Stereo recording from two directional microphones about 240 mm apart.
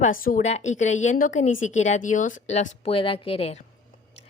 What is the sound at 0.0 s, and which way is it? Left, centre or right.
A woman's voice, left.